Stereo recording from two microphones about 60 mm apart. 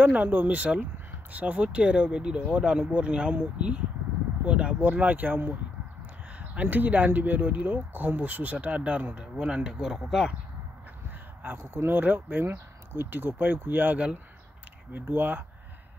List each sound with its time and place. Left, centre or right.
0.0 s speech: right
6.5 s speech: right; by 10.3 s centre
11.7 s speech: right